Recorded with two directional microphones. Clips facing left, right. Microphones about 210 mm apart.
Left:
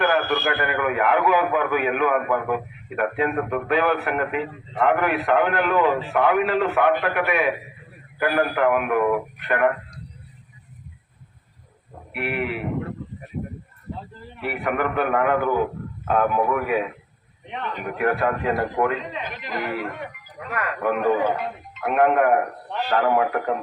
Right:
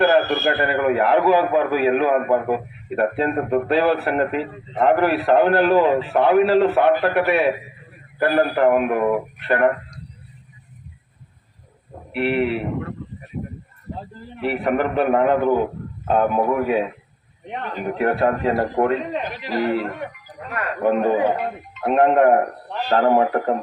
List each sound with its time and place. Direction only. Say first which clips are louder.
0.0 s a man's voice: right 5 dB; 35° right (ahead or behind)
12.1 s a man's voice: right 6 dB; 30° right (ahead or behind)
14.4 s a man's voice: right 4 dB; 30° right (ahead or behind)